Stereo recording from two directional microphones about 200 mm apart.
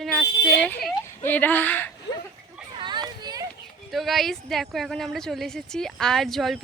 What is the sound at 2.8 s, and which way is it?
Children playing, 20° right (ahead or behind).